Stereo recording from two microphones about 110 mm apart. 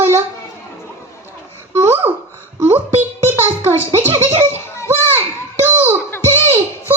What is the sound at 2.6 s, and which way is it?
Music, 20° right (ahead or behind).